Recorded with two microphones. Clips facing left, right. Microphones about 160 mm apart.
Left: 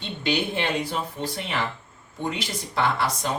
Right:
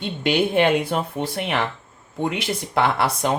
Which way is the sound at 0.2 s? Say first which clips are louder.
Right 7 dB; 55° right (ahead or behind).